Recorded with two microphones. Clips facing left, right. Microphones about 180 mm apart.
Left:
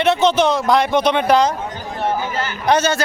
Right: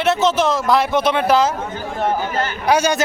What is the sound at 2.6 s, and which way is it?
Speech, 10° right (ahead or behind).